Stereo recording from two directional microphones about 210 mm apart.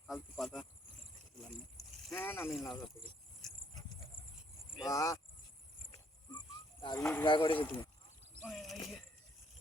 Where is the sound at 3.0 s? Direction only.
25° left (ahead or behind).